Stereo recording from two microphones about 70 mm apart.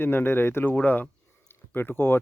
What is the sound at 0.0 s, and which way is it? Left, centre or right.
Speech, left.